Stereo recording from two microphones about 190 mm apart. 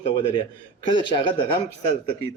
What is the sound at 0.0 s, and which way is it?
A man's voice, 30° left (ahead or behind).